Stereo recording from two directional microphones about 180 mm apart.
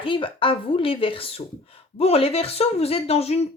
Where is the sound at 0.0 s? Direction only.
30° left (ahead or behind).